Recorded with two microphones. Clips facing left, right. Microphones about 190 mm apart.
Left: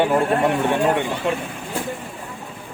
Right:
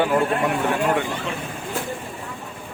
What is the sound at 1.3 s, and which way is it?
Speech, 55° left (ahead or behind).